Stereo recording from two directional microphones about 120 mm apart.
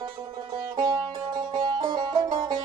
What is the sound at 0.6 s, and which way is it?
Music, 35° right (ahead or behind).